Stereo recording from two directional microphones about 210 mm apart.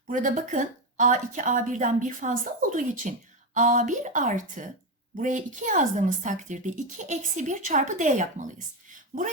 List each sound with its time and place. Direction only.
0.1 s speech: 40° right (ahead or behind)